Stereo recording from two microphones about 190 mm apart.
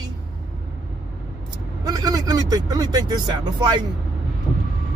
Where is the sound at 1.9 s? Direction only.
20° right (ahead or behind).